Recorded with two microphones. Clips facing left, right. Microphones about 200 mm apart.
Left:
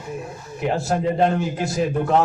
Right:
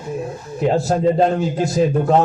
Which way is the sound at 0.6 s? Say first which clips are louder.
Right 5 dB; 35° right (ahead or behind).